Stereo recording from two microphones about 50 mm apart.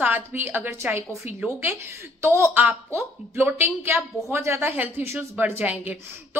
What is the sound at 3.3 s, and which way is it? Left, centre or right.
Speech, right.